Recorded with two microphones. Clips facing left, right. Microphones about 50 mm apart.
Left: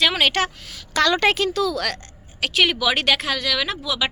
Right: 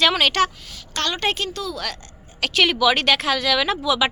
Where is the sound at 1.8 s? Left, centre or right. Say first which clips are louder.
Left 4 dB; left.